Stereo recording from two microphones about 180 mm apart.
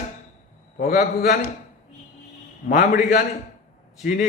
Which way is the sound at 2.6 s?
50° left (ahead or behind).